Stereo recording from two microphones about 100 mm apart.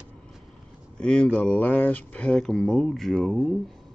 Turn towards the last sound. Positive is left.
turn(degrees=0)  # may be behind; listen again after turning